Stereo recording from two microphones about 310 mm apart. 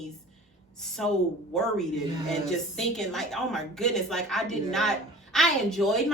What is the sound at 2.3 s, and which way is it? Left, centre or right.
A woman's voice, centre.